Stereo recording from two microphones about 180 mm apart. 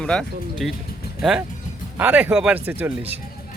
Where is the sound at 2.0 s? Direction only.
10° right (ahead or behind).